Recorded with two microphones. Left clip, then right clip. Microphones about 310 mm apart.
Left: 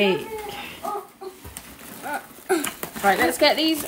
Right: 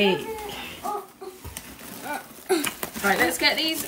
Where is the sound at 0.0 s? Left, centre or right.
Centre.